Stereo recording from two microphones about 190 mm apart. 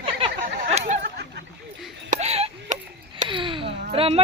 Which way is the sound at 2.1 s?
35° right (ahead or behind).